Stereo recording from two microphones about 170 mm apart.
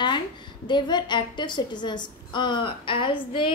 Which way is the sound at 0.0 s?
25° left (ahead or behind).